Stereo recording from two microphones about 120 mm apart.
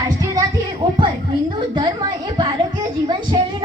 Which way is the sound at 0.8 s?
40° right (ahead or behind).